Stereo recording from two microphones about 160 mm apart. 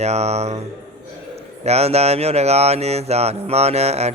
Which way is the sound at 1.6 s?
40° right (ahead or behind).